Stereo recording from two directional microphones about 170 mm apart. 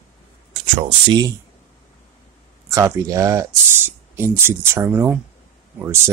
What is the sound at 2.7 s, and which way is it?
Speech, 20° right (ahead or behind).